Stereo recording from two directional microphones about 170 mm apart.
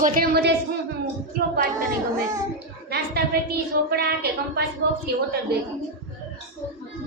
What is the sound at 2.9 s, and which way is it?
Speech, 70° right (ahead or behind).